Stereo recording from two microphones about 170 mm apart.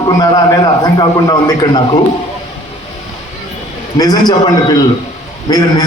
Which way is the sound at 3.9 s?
25° left (ahead or behind).